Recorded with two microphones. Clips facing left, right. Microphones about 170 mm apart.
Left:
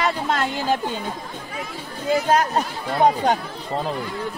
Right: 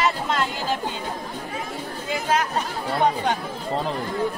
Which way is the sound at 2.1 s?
40° left (ahead or behind).